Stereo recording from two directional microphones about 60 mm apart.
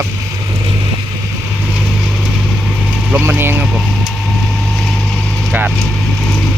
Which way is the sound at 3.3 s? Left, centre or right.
Right.